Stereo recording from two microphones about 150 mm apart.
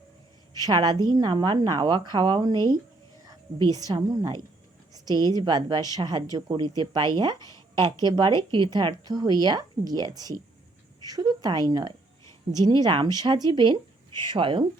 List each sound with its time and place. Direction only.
0.5 s a woman's voice: 25° right (ahead or behind)
3.8 s a woman's voice: 25° right (ahead or behind)
7.3 s speech: 25° left (ahead or behind)
8.0 s a woman's voice: 30° right (ahead or behind)